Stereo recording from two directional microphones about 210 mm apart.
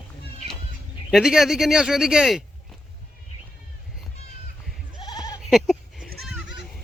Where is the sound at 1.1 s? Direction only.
5° right (ahead or behind).